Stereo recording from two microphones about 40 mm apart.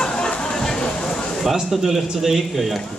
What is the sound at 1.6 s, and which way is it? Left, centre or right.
Speech, centre.